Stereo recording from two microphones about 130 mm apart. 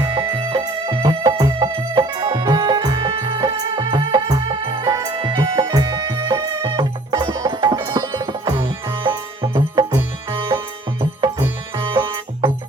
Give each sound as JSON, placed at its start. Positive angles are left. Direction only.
{"t": 0.0, "sound": "music", "side_deg": -40}
{"t": 11.8, "sound": "music", "side_deg": -40}